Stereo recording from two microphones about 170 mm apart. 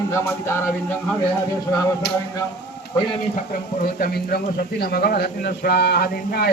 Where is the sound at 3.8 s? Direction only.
60° left (ahead or behind).